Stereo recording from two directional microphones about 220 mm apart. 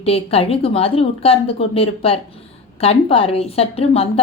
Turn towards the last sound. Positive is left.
turn(degrees=25)  # may be behind; listen again after turning